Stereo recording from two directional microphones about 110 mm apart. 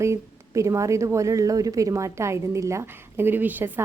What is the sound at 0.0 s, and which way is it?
A woman's voice, 25° right (ahead or behind).